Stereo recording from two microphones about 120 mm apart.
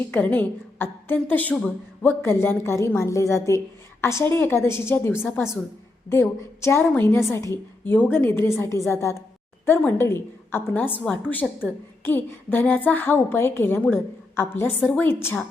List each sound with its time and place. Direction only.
0.1 s a woman's voice: 15° left (ahead or behind)